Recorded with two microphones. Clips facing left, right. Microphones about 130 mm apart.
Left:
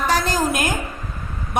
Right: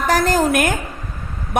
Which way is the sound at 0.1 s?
50° right (ahead or behind).